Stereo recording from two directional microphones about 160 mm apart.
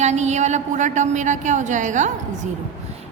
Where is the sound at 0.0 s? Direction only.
45° right (ahead or behind).